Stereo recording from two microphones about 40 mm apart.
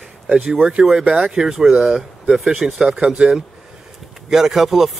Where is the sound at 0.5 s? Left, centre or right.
Centre.